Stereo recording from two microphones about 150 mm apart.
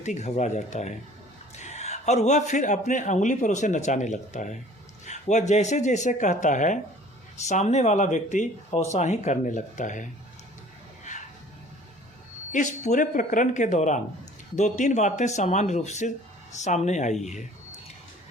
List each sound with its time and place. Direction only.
0.0 s a man's voice: 50° left (ahead or behind)
11.1 s a sound: 55° left (ahead or behind)
12.5 s a man's voice: 55° left (ahead or behind)